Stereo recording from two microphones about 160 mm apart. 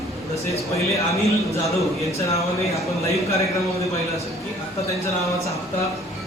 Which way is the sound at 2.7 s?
20° left (ahead or behind).